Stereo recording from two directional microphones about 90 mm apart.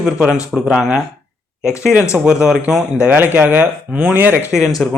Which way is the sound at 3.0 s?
20° right (ahead or behind).